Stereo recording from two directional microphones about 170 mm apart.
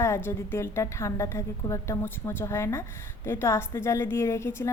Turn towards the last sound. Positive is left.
turn(degrees=15)  # may be behind; listen again after turning